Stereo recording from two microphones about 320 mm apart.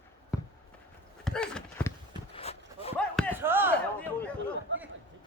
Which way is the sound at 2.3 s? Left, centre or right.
Centre.